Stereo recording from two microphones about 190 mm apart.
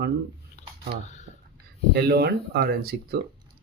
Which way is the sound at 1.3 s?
80° right.